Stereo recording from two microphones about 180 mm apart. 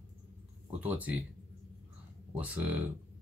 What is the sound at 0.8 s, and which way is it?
Speech, 10° right (ahead or behind).